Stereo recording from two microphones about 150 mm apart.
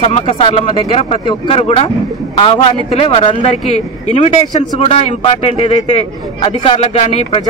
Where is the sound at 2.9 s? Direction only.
35° left (ahead or behind).